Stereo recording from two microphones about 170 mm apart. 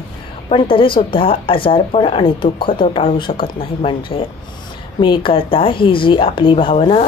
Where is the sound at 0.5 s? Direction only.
30° left (ahead or behind).